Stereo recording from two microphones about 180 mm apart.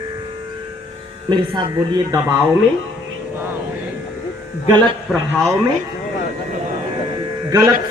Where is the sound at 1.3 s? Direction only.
25° right (ahead or behind).